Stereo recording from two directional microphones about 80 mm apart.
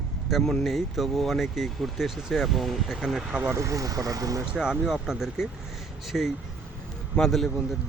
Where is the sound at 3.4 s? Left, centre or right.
Right.